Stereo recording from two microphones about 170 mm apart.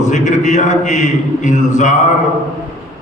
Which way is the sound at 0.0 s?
45° left (ahead or behind).